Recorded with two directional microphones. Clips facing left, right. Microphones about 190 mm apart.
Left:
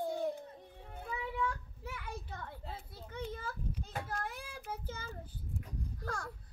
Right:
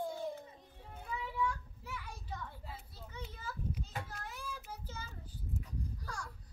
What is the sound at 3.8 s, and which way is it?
Child singing, 50° left (ahead or behind).